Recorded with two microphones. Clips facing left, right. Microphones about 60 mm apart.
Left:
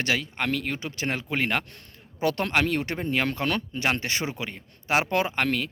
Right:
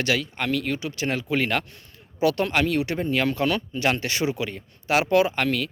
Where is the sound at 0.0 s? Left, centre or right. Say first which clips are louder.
Right 2 dB; left.